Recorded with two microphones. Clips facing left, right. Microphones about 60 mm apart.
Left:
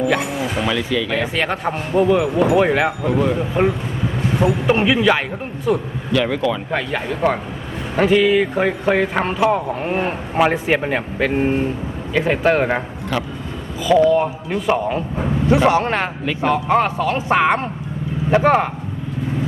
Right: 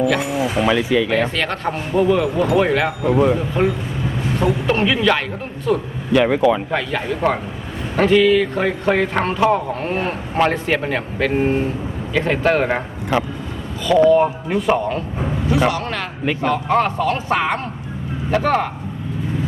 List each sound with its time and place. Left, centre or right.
0.6 s speech: centre
1.4 s speech: centre
3.1 s speech: centre
3.3 s speech: centre
6.1 s speech: centre
6.7 s a man's voice: centre
13.1 s speech: centre
14.1 s a man's voice: centre
15.5 s a man's voice: left
16.4 s speech: centre